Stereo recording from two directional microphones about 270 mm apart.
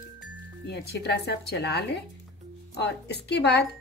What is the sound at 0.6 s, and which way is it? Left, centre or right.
Speech, left.